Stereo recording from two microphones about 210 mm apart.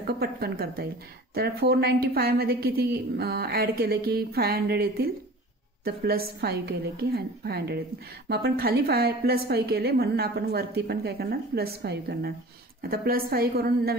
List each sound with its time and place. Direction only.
0.0 s a woman's voice: 50° right (ahead or behind)